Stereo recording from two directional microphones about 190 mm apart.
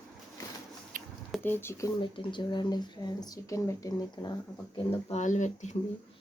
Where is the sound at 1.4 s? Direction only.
10° left (ahead or behind).